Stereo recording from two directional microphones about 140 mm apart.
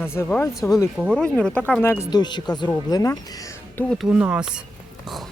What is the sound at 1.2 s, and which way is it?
Speech, 5° left (ahead or behind).